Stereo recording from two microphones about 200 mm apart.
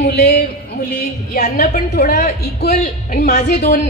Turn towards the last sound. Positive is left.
turn(degrees=40)  # may be behind; listen again after turning